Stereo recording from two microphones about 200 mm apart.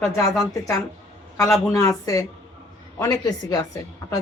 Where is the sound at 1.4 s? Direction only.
15° left (ahead or behind).